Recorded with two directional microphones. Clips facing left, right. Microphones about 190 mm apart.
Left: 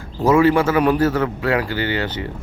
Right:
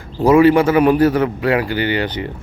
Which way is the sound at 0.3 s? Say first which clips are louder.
Right 4 dB; 15° right (ahead or behind).